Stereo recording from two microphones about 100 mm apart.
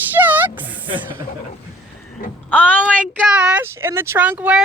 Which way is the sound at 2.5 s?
15° left (ahead or behind).